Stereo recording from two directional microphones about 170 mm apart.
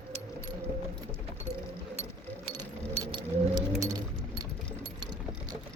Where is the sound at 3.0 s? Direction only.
25° right (ahead or behind).